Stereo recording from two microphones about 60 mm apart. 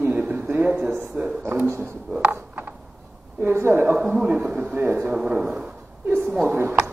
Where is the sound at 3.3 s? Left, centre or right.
Right.